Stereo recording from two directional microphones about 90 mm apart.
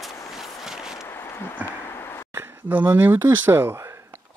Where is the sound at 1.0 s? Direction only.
25° left (ahead or behind).